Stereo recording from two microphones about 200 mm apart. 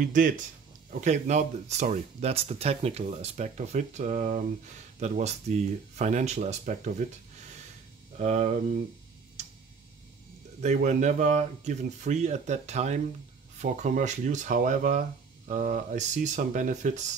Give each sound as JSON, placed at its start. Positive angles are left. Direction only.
{"t": 0.0, "sound": "speech", "side_deg": -40}
{"t": 8.2, "sound": "speech", "side_deg": -35}
{"t": 10.6, "sound": "speech", "side_deg": -35}